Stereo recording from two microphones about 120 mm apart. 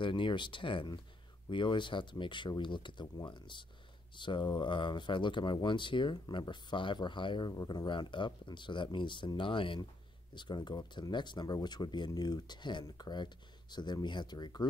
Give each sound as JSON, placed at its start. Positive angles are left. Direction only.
{"t": 0.0, "sound": "speech", "side_deg": 45}